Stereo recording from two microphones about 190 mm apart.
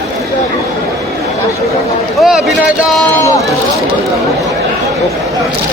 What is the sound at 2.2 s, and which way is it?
Speech, centre (ahead or behind).